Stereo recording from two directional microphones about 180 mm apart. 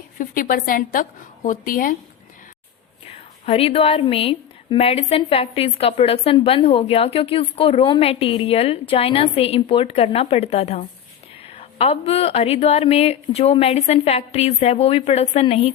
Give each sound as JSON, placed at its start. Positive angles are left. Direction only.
{"t": 0.2, "sound": "a woman's voice", "side_deg": 50}
{"t": 3.4, "sound": "a woman's voice", "side_deg": 35}